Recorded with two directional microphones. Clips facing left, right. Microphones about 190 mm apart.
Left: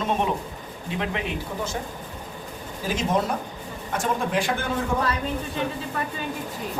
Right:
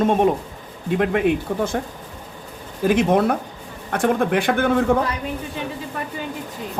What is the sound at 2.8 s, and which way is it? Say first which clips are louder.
A man's voice: right 8 dB; 60° right (ahead or behind).